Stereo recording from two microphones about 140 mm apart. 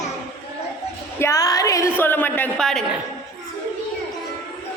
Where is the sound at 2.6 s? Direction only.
5° left (ahead or behind).